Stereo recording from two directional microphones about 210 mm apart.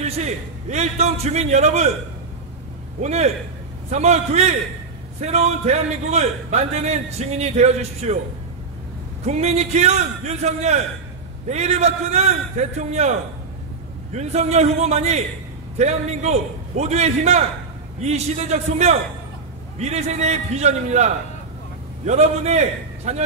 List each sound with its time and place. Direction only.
0.0 s a man's voice: 30° right (ahead or behind)
3.0 s a man's voice: 30° right (ahead or behind)
9.2 s a man's voice: 30° right (ahead or behind)